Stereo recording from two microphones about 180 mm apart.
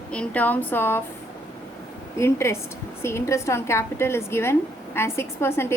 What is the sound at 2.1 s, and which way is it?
A woman's voice, 15° left (ahead or behind).